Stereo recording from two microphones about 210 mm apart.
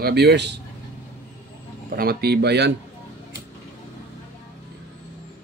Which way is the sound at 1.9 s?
45° right (ahead or behind).